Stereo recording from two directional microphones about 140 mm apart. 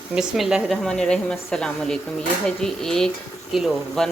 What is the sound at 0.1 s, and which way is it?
Speech, 5° right (ahead or behind).